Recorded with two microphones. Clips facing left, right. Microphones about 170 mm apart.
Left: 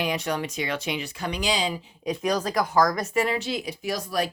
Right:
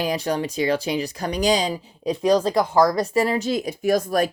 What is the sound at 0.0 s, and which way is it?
Speech, 35° right (ahead or behind).